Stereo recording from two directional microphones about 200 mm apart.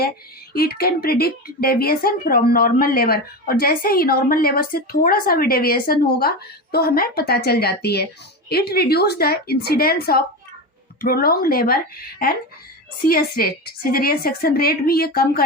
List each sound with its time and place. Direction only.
0.5 s a woman's voice: 50° left (ahead or behind)